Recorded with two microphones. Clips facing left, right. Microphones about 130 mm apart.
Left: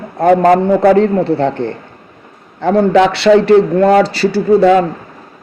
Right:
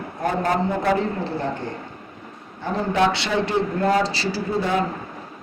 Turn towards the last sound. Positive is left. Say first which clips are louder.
# left 14 dB
turn(degrees=75)  # may be behind; listen again after turning